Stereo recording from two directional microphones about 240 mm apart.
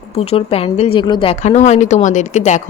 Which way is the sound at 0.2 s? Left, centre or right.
Left.